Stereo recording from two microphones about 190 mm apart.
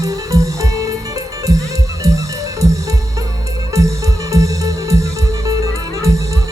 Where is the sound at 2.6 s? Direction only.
15° right (ahead or behind).